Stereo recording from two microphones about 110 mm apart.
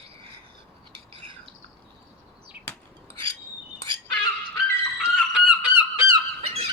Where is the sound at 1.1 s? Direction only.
50° right (ahead or behind).